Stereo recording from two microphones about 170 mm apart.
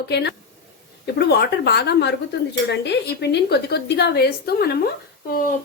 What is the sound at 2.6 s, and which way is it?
A woman's voice, 90° left.